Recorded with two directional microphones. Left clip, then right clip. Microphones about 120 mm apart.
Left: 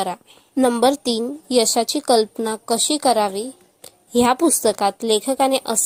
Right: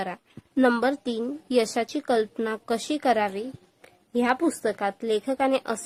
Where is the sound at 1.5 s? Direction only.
25° left (ahead or behind).